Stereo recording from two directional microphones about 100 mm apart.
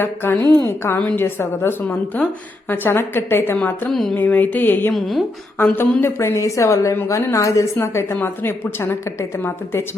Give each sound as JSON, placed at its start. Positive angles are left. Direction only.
{"t": 0.0, "sound": "a woman's voice", "side_deg": 20}
{"t": 3.8, "sound": "music", "side_deg": 0}
{"t": 4.1, "sound": "a woman's voice", "side_deg": 20}
{"t": 4.9, "sound": "music", "side_deg": 0}
{"t": 5.7, "sound": "a woman's voice", "side_deg": 20}